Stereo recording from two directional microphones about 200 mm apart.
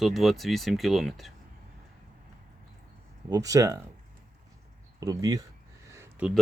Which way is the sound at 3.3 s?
15° right (ahead or behind).